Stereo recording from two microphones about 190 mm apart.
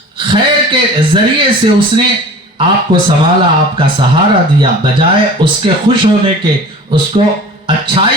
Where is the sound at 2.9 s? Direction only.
45° right (ahead or behind).